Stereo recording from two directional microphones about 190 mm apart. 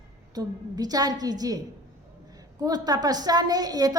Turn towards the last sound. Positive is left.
turn(degrees=-20)  # may be behind; listen again after turning